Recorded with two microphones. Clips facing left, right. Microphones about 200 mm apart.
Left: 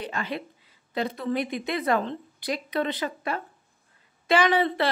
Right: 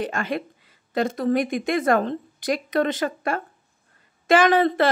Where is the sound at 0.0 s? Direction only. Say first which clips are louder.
Right 5 dB; 50° right (ahead or behind).